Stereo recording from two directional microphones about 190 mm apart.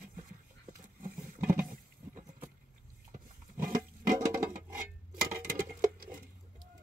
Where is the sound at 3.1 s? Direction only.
45° right (ahead or behind).